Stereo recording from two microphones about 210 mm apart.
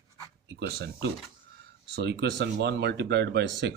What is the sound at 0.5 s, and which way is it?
Speech, 50° right (ahead or behind).